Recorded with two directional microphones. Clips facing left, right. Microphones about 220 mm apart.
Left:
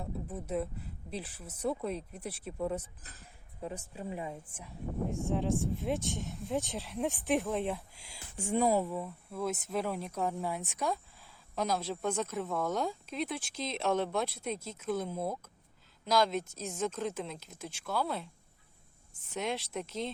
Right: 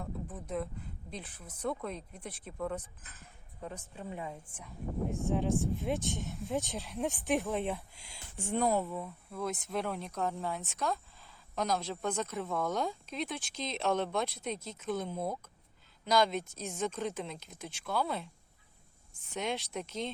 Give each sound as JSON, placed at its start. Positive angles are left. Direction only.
{"t": 0.3, "sound": "a woman's voice", "side_deg": 10}
{"t": 3.0, "sound": "speech", "side_deg": 35}
{"t": 3.6, "sound": "a woman's voice", "side_deg": 10}
{"t": 19.3, "sound": "speech", "side_deg": 0}